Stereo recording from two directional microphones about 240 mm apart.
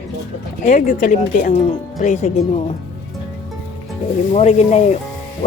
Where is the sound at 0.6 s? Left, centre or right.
Left.